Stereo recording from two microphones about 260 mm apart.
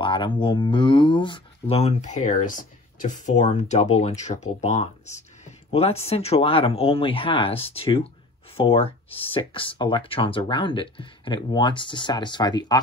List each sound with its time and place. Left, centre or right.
0.0 s speech: centre